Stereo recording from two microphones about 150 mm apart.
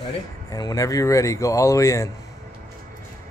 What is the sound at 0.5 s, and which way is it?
Speech, 25° left (ahead or behind).